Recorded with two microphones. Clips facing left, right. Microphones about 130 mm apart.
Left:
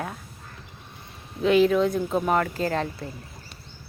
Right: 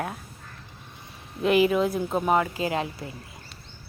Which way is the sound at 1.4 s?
5° right (ahead or behind).